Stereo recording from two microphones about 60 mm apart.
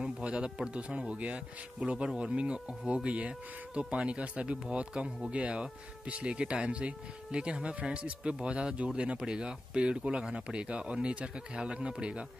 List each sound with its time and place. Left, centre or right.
0.0 s speech: centre